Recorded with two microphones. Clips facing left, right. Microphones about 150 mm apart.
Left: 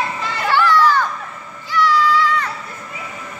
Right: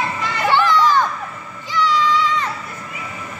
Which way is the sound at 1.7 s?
20° right (ahead or behind).